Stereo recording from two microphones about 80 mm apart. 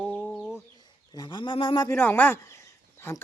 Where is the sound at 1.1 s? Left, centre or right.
Left.